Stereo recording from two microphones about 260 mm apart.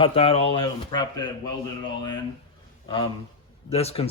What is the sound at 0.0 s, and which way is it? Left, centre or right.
Speech, left.